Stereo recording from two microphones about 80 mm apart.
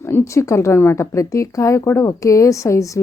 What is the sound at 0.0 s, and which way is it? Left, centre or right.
Speech, left.